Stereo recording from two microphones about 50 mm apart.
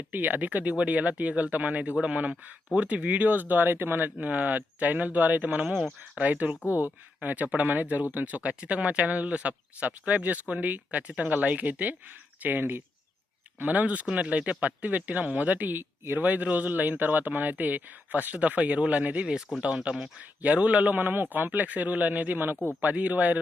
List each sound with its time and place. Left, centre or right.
0.1 s speech: right
13.6 s speech: right
16.2 s speech: right
19.5 s speech: centre
19.9 s speech: right